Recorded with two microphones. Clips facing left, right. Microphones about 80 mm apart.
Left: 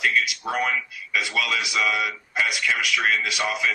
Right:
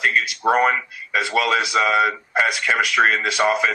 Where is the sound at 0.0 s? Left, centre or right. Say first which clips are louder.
Right 4 dB; right.